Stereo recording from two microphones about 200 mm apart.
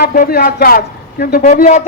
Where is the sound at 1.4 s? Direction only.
35° left (ahead or behind).